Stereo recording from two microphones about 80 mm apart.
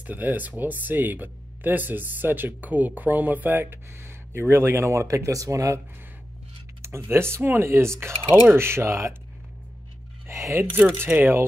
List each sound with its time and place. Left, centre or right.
0.0 s speech: right
7.1 s speech: right
10.2 s a sound: right
11.0 s speech: right